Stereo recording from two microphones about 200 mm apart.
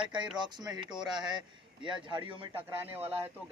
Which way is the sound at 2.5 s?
10° right (ahead or behind).